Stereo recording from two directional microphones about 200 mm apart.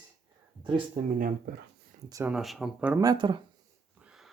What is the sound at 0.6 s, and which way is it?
Speech, 25° right (ahead or behind).